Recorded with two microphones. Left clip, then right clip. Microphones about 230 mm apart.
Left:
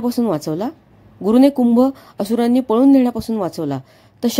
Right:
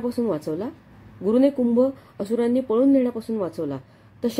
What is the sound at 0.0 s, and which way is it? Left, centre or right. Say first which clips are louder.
Speech: left 5 dB; left.